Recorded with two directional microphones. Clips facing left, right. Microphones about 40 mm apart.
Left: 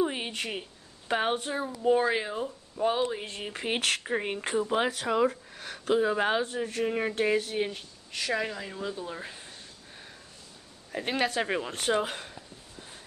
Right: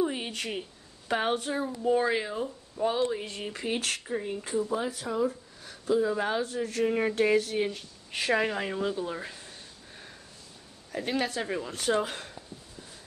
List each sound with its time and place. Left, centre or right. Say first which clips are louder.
0.0 s a woman's voice: even; left
3.5 s speech: left 1 dB; left
3.8 s speech: left 3 dB; left
4.3 s speech: even; left
5.9 s speech: left 2 dB; left
6.7 s speech: right 2 dB; centre
8.1 s speech: right 4 dB; right
8.7 s speech: right 4 dB; centre
11.1 s speech: left 2 dB; left
11.6 s speech: left 1 dB; left
12.1 s speech: left 1 dB; centre